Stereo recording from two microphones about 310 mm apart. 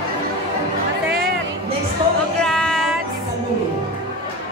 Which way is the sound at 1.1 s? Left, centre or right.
Right.